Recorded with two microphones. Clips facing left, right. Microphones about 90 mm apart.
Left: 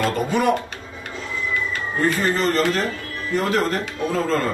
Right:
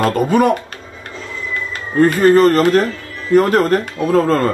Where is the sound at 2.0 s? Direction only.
50° right (ahead or behind).